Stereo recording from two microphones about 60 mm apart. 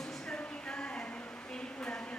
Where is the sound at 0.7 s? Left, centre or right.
Centre.